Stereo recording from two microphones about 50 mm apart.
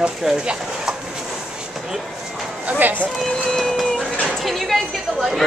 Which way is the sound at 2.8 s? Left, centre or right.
Right.